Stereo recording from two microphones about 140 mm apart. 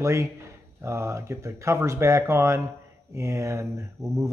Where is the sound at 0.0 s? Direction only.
20° right (ahead or behind).